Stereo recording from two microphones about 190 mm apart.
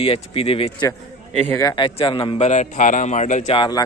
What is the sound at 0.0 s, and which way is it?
Speech, 30° left (ahead or behind).